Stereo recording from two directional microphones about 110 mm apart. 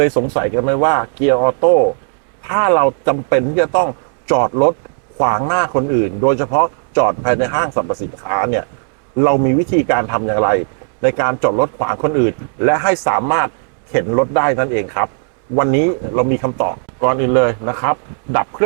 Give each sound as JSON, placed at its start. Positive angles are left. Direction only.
{"t": 0.0, "sound": "a man's voice", "side_deg": -25}